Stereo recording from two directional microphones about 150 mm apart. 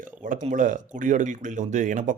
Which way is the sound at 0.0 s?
65° right (ahead or behind).